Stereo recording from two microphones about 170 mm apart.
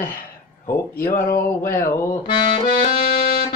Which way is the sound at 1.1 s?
55° left (ahead or behind).